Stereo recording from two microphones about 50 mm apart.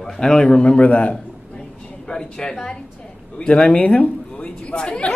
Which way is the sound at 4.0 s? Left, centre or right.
Left.